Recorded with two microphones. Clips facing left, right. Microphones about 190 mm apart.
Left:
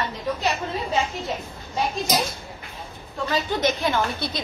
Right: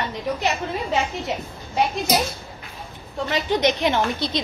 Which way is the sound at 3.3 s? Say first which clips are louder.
Right 3 dB; 20° right (ahead or behind).